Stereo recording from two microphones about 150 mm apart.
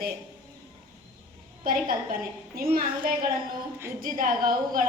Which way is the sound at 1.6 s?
70° right (ahead or behind).